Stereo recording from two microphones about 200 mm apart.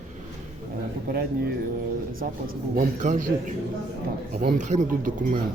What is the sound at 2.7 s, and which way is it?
Speech, 35° right (ahead or behind).